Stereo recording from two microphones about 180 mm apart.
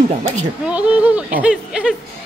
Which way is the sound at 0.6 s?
5° right (ahead or behind).